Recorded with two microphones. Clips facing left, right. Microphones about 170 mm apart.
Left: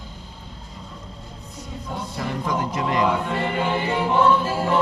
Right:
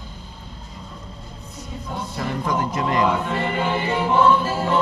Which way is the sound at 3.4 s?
15° left (ahead or behind).